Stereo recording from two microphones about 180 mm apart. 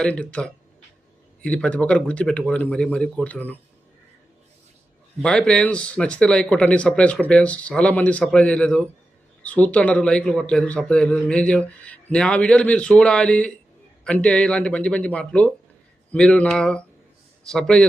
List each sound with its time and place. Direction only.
0.0 s a man's voice: 5° left (ahead or behind)
5.2 s a man's voice: 5° left (ahead or behind)